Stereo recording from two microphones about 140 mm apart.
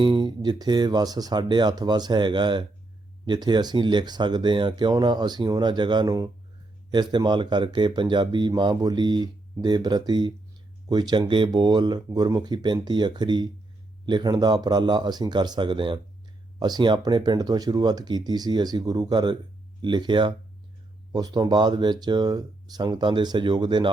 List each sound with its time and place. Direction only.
0.0 s speech: 35° right (ahead or behind)